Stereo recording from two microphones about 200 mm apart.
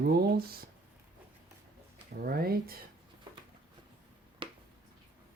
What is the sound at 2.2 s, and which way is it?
Speech, 50° right (ahead or behind).